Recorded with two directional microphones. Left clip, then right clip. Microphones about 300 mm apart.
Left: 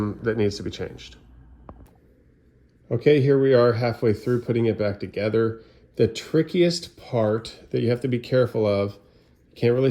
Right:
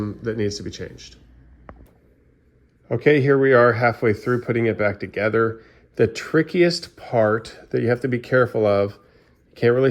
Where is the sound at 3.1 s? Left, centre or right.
Centre.